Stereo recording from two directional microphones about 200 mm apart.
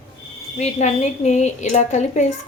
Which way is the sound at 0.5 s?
35° left (ahead or behind).